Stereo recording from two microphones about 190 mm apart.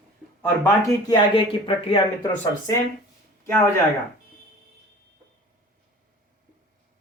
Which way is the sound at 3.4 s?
15° left (ahead or behind).